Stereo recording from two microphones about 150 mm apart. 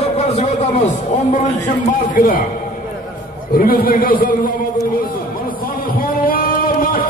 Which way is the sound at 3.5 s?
75° left (ahead or behind).